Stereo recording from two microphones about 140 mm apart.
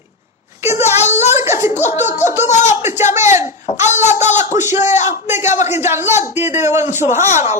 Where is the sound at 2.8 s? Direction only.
15° right (ahead or behind).